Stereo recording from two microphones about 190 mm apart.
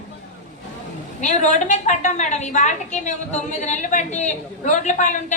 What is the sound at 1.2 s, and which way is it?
A woman's voice, 40° left (ahead or behind).